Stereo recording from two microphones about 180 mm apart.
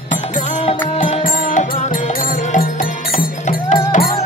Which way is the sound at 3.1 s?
45° left (ahead or behind).